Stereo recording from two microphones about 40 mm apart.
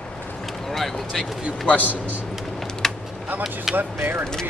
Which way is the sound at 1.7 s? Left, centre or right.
Left.